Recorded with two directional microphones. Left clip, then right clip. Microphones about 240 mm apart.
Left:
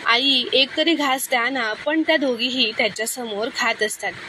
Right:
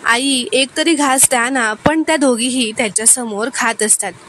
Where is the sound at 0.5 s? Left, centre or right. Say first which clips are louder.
Right 3 dB; right.